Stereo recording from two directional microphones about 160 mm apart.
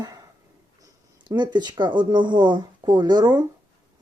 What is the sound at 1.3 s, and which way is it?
Speech, 25° right (ahead or behind).